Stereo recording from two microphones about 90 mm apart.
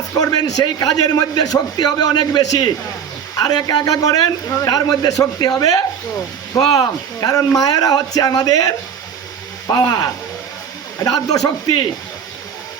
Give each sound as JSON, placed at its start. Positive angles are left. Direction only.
{"t": 0.1, "sound": "speech", "side_deg": 40}